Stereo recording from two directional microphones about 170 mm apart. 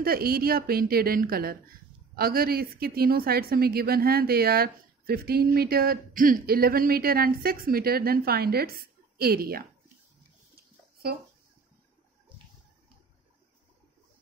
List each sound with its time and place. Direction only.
0.0 s a woman's voice: 60° right (ahead or behind)